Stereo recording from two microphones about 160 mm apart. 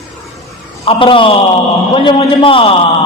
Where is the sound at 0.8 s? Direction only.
35° left (ahead or behind).